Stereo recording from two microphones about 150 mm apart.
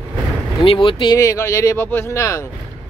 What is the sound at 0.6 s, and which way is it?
Speech, 35° left (ahead or behind).